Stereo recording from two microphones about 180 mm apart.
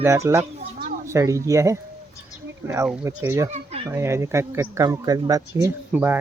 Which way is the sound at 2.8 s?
5° right (ahead or behind).